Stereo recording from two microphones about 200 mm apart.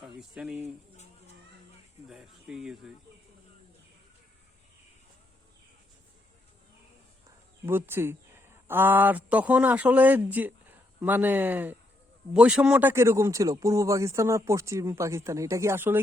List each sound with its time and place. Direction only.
0.0 s speech: centre (ahead or behind)
2.0 s speech: 5° right (ahead or behind)
7.6 s a man's voice: 10° right (ahead or behind)